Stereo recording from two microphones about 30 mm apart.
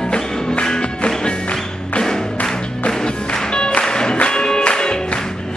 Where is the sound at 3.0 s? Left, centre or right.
Left.